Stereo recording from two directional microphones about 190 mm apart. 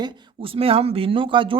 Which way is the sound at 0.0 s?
30° right (ahead or behind).